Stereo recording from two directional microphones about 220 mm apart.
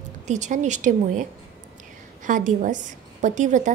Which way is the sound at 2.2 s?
35° right (ahead or behind).